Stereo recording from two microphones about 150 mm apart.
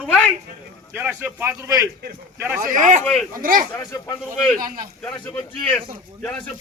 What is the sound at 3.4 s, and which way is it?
Speech, 70° right (ahead or behind).